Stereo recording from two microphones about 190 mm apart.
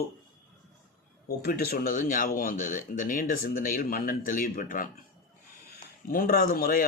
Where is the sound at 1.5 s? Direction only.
50° left (ahead or behind).